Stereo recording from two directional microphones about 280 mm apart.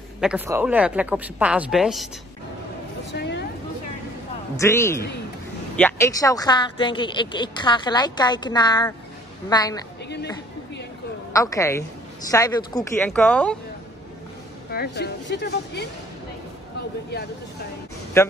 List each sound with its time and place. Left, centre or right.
0.2 s a woman's voice: centre
3.1 s vehicle: left
4.6 s a woman's voice: centre
11.3 s a woman's voice: centre
14.7 s a woman's voice: left
18.2 s a woman's voice: centre